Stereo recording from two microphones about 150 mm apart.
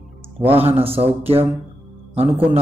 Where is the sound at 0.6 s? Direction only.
40° right (ahead or behind).